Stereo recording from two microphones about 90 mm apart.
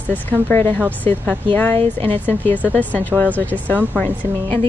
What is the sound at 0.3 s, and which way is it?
Speech, 20° left (ahead or behind).